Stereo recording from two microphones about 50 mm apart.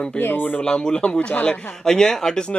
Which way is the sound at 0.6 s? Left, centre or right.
Centre.